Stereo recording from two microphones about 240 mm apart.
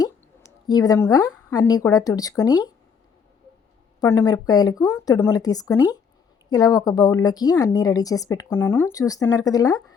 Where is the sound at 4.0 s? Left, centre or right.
Centre.